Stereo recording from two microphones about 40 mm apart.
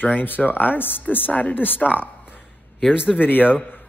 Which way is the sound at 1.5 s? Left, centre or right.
Left.